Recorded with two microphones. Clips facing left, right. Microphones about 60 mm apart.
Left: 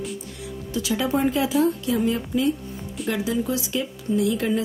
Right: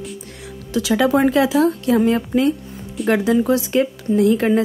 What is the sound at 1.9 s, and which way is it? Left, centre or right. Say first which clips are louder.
A woman's voice: right 7 dB; right.